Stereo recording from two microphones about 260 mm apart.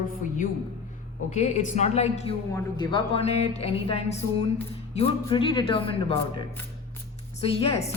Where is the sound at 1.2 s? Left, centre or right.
Left.